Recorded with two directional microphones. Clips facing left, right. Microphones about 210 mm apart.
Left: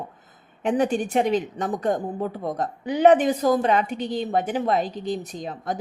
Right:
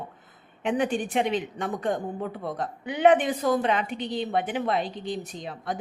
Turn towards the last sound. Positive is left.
turn(degrees=45)  # may be behind; listen again after turning